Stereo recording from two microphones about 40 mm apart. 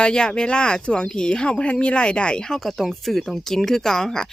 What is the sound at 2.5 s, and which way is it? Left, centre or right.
Speech, centre.